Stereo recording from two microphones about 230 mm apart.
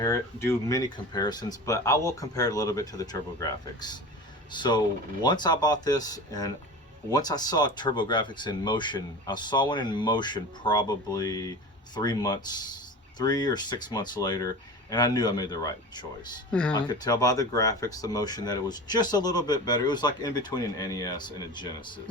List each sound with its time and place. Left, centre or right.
0.0 s speech: centre
16.5 s speech: centre
16.7 s speech: centre